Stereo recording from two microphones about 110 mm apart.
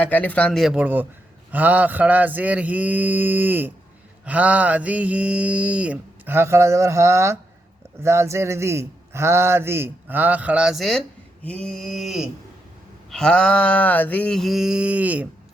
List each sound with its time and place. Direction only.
0.0 s mantra: 15° left (ahead or behind)
0.6 s mantra: 10° right (ahead or behind); by 7.3 s 25° right (ahead or behind)
8.0 s speech: 25° right (ahead or behind); by 11.0 s centre (ahead or behind)
11.6 s a sound: 5° left (ahead or behind)
13.1 s mantra: 5° left (ahead or behind); by 15.3 s 15° right (ahead or behind)